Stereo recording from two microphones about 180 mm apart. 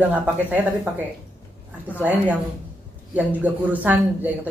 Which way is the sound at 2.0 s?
10° right (ahead or behind).